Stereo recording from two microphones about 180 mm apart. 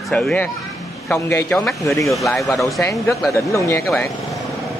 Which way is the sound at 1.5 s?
Centre (ahead or behind).